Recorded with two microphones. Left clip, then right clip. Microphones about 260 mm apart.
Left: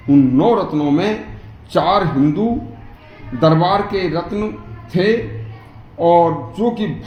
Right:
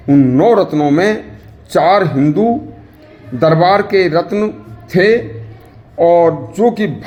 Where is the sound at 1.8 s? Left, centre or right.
Right.